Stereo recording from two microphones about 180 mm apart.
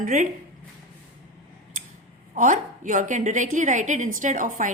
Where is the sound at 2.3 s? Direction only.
45° right (ahead or behind).